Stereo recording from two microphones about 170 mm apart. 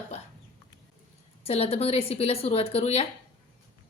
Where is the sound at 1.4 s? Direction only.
35° left (ahead or behind).